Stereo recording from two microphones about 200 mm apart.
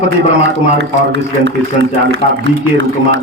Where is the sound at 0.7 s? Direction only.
65° right (ahead or behind).